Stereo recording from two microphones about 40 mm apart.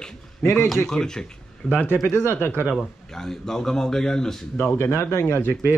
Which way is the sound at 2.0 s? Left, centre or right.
Left.